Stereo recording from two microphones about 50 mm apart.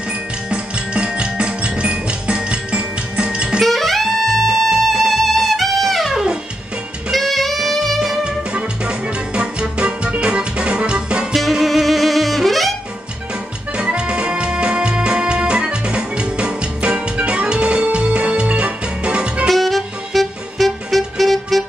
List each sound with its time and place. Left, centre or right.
0.5 s music: centre
3.6 s music: centre
7.1 s saxophone: centre
8.5 s music: right
11.3 s saxophone: centre
13.7 s music: centre
19.4 s music: centre